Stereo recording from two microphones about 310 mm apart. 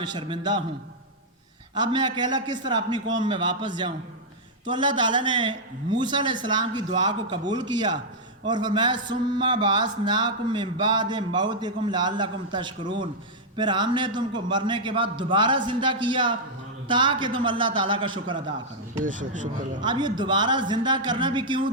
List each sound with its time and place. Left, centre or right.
0.0 s a man's voice: centre
1.7 s a man's voice: centre
19.8 s a man's voice: centre